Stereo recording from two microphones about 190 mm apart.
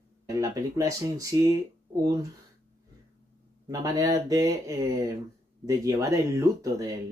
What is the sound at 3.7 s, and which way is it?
Speech, 20° right (ahead or behind).